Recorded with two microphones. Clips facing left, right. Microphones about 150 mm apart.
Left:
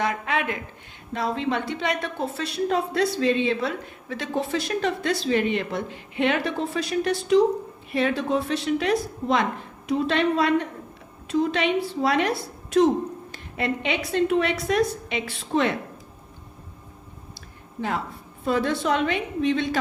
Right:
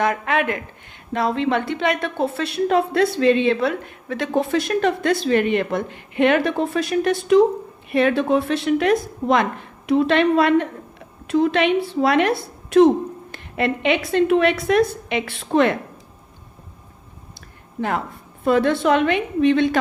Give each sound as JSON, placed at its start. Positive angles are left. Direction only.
{"t": 0.0, "sound": "a woman's voice", "side_deg": -55}
{"t": 13.3, "sound": "a woman's voice", "side_deg": -65}
{"t": 17.7, "sound": "a woman's voice", "side_deg": -55}